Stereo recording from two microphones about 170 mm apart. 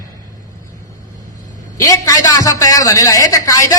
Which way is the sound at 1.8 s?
20° left (ahead or behind).